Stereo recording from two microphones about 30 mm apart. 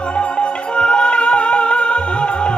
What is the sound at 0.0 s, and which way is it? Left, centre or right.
Music, left.